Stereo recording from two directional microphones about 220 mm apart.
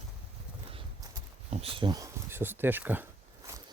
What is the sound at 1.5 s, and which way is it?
Speech, 25° right (ahead or behind).